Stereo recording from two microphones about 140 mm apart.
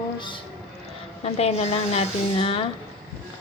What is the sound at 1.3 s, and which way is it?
A woman's voice, 50° left (ahead or behind).